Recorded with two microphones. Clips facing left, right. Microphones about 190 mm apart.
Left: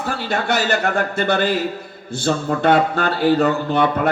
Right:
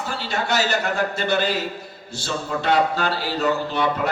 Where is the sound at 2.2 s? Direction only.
55° left (ahead or behind).